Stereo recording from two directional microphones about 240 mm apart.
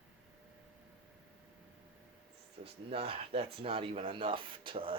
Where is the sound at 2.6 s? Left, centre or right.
Right.